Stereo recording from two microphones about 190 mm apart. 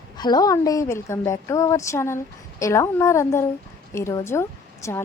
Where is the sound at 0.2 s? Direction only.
20° left (ahead or behind).